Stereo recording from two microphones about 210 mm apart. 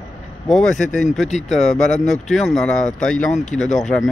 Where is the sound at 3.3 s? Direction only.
30° left (ahead or behind).